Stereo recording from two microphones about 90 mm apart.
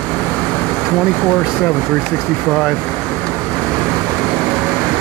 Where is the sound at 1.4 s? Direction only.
10° right (ahead or behind).